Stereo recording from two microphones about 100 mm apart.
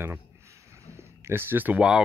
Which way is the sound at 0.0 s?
25° right (ahead or behind).